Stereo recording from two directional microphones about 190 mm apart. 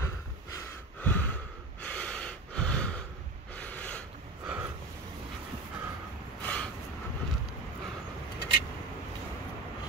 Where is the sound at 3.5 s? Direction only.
10° left (ahead or behind).